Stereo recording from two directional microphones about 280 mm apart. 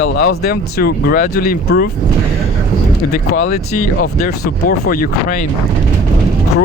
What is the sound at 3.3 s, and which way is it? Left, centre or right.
Speech, left.